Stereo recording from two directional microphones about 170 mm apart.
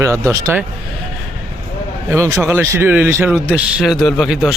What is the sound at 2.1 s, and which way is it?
Speech, 15° right (ahead or behind).